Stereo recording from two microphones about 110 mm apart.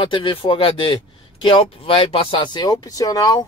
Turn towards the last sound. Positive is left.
turn(degrees=35)  # may be behind; listen again after turning